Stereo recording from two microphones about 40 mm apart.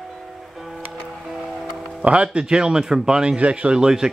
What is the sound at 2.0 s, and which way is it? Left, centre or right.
Speech, right.